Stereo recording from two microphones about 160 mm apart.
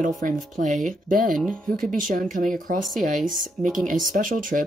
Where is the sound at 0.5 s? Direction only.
50° right (ahead or behind).